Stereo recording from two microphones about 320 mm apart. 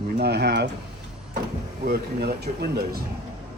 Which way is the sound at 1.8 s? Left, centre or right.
Right.